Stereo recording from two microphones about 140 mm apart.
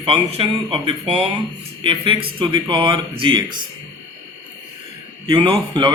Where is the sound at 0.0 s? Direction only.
45° right (ahead or behind).